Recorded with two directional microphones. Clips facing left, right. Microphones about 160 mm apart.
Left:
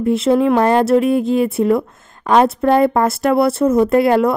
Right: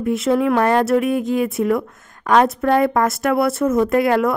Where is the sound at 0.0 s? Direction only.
30° left (ahead or behind).